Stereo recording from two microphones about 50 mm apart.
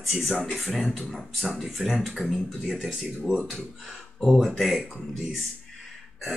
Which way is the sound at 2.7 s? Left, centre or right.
Centre.